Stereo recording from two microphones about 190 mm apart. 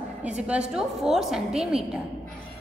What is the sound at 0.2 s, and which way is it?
A woman's voice, 5° right (ahead or behind).